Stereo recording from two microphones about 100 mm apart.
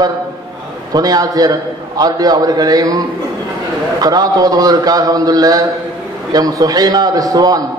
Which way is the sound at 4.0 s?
40° right (ahead or behind).